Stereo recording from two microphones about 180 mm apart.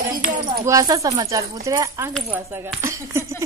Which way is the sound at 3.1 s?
15° right (ahead or behind).